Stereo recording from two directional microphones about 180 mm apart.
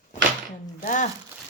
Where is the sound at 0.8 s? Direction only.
45° left (ahead or behind).